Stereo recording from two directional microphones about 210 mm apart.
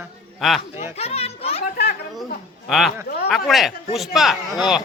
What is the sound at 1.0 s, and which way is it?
Children playing, 30° left (ahead or behind).